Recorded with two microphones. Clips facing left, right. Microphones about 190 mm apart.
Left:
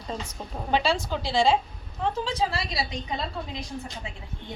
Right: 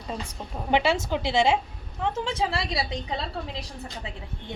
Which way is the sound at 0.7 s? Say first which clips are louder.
Right 2 dB; 20° right (ahead or behind).